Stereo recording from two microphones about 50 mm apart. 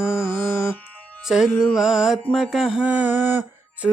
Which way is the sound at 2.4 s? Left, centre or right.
Centre.